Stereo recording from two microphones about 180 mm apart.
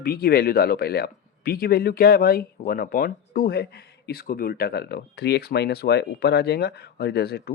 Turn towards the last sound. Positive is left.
turn(degrees=60)  # may be behind; listen again after turning